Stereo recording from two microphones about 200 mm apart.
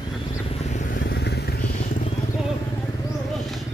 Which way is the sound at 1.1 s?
55° left (ahead or behind).